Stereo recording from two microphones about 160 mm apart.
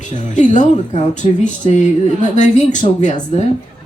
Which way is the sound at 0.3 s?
50° left (ahead or behind).